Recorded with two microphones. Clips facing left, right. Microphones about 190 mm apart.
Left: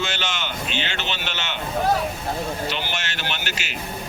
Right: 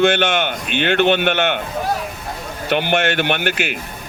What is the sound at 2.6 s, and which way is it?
A man's voice, 55° right (ahead or behind).